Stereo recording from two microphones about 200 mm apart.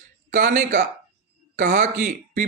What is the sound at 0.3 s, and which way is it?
Speech, 45° right (ahead or behind).